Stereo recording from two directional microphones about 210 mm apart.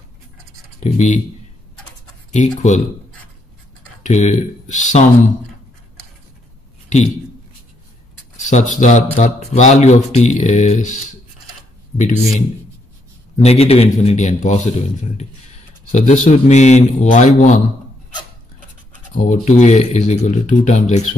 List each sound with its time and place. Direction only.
0.7 s speech: 35° left (ahead or behind)
2.3 s speech: 35° left (ahead or behind)
4.0 s speech: 30° left (ahead or behind)
8.5 s speech: 35° left (ahead or behind)
19.1 s speech: 40° left (ahead or behind)